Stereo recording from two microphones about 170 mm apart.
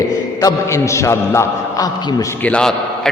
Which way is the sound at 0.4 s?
15° left (ahead or behind).